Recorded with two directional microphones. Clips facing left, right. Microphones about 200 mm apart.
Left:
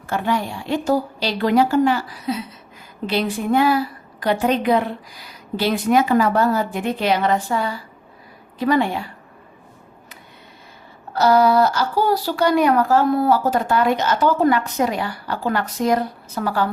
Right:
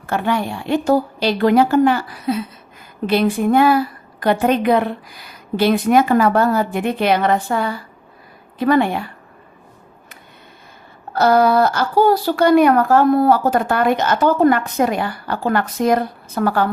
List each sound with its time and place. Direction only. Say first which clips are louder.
0.1 s speech: right 2 dB; 60° right (ahead or behind)
11.1 s speech: right 1 dB; 55° right (ahead or behind)